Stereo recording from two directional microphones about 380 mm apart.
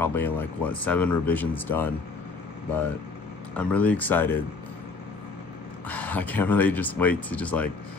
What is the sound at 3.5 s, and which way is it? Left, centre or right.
Speech, centre.